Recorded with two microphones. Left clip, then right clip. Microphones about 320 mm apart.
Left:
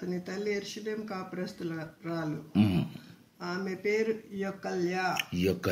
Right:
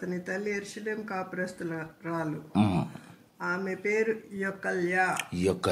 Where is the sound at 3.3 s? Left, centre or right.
Centre.